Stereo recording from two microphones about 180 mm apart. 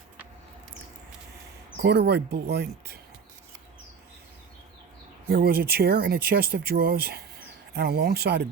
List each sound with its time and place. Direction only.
1.8 s speech: 65° right (ahead or behind)
5.3 s speech: 55° right (ahead or behind)